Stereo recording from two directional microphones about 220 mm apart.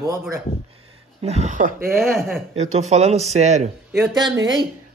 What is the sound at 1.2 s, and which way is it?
Speech, 30° right (ahead or behind).